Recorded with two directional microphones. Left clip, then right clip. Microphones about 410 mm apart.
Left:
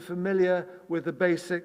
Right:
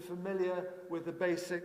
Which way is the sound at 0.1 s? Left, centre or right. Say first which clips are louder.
Left 11 dB; left.